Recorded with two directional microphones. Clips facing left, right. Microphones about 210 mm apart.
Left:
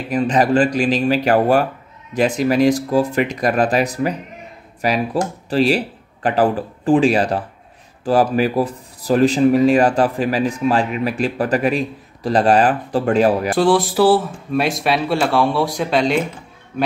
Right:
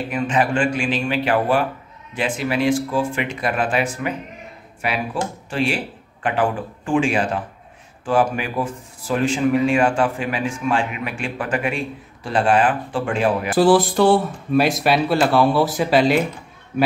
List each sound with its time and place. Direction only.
0.1 s speech: 35° left (ahead or behind)
13.6 s speech: centre (ahead or behind)